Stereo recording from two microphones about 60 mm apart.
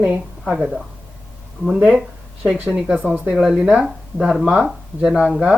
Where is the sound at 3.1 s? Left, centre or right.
Centre.